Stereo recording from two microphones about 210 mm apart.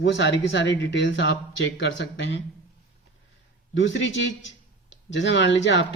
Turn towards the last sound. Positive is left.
turn(degrees=55)  # may be behind; listen again after turning